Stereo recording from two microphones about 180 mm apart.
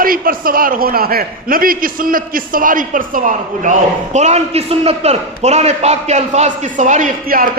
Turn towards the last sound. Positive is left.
turn(degrees=-50)  # may be behind; listen again after turning